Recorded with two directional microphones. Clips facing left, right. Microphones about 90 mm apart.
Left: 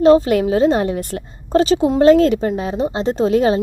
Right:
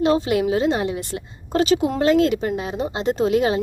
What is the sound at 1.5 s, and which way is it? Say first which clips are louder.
A woman's voice: left 5 dB; 35° left (ahead or behind).